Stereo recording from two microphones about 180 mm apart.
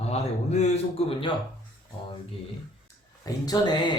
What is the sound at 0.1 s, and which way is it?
A man's voice, 40° left (ahead or behind).